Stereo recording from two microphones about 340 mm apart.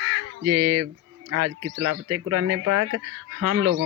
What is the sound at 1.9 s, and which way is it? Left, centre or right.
Mantra, right.